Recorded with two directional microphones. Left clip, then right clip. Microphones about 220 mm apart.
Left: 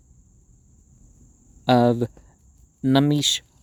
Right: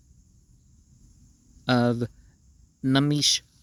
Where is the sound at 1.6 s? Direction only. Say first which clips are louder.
Left 6 dB; 20° right (ahead or behind).